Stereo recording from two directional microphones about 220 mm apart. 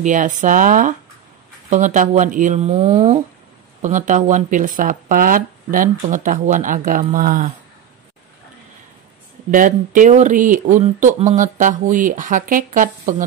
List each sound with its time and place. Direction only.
0.0 s speech: 35° right (ahead or behind)
9.5 s speech: 35° right (ahead or behind)